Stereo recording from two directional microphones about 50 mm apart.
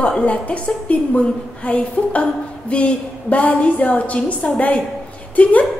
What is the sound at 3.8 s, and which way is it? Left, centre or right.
Speech, left.